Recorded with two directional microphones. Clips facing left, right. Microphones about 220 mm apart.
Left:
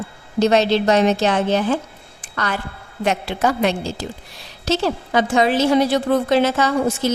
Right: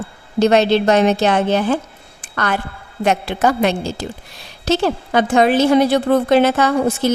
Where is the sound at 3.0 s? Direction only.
50° right (ahead or behind).